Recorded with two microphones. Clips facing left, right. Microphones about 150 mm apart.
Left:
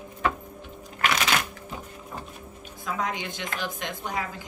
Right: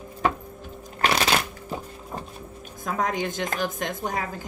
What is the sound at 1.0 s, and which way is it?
Shuffling cards, 35° right (ahead or behind).